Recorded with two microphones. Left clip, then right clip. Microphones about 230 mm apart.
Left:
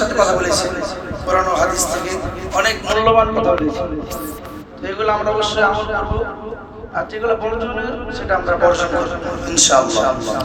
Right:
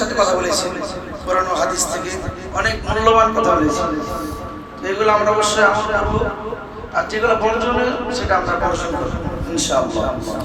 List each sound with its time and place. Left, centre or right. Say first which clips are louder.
0.1 s a man's voice: left 2 dB; left
1.3 s a sound: left 2 dB; left
2.6 s speech: left 3 dB; left
4.9 s speech: right 3 dB; left
7.4 s a man's voice: right 4 dB; left